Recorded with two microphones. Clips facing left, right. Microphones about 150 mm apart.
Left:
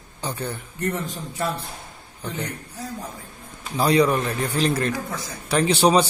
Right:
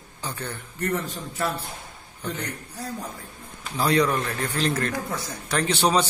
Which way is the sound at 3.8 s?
15° left (ahead or behind).